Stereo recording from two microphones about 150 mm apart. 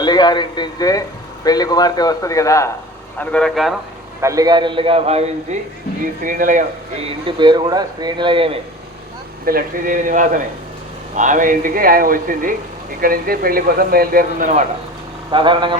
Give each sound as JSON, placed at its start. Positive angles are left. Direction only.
{"t": 0.0, "sound": "a man's voice", "side_deg": 30}
{"t": 3.2, "sound": "speech", "side_deg": 5}
{"t": 4.2, "sound": "speech", "side_deg": -20}
{"t": 6.2, "sound": "speech", "side_deg": -60}
{"t": 7.0, "sound": "speech", "side_deg": -35}
{"t": 9.5, "sound": "speech", "side_deg": -75}
{"t": 13.0, "sound": "speech", "side_deg": -75}
{"t": 15.3, "sound": "speech", "side_deg": -35}